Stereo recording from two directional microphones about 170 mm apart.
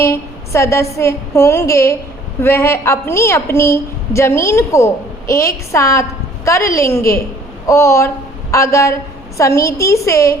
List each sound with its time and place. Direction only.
0.0 s a woman's voice: 15° left (ahead or behind)